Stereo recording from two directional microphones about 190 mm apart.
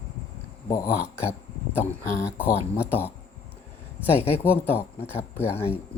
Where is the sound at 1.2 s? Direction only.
10° left (ahead or behind).